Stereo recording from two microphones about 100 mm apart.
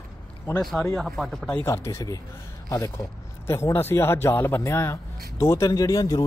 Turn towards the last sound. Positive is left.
turn(degrees=35)  # may be behind; listen again after turning